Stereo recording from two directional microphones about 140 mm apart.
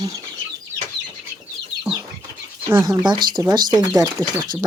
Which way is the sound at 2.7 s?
20° right (ahead or behind).